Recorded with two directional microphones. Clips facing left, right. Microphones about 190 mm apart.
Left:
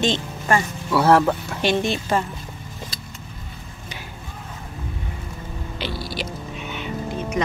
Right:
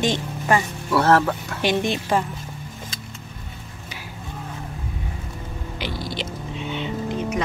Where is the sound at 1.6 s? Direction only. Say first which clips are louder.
Right 2 dB; 15° right (ahead or behind).